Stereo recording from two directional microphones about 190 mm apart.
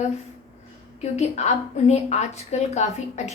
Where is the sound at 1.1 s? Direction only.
35° left (ahead or behind).